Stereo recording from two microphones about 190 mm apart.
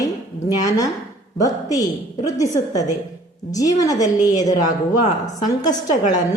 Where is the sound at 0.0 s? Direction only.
20° left (ahead or behind).